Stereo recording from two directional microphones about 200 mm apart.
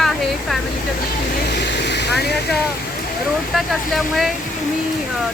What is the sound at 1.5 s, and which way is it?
Vehicle, 60° left (ahead or behind).